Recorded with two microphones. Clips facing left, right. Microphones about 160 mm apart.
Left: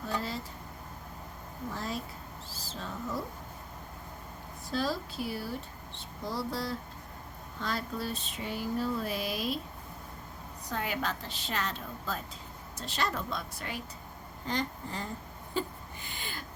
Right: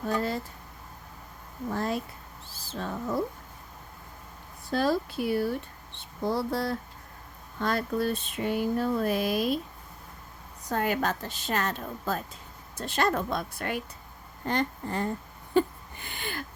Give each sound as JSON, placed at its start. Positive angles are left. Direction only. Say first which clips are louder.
{"t": 1.7, "sound": "speech", "louder": "right 8 dB", "side_deg": -55}
{"t": 4.7, "sound": "speech", "louder": "right 6 dB", "side_deg": -55}
{"t": 10.7, "sound": "a woman's voice", "louder": "right 6 dB", "side_deg": -50}
{"t": 15.5, "sound": "a sound", "louder": "right 10 dB", "side_deg": -60}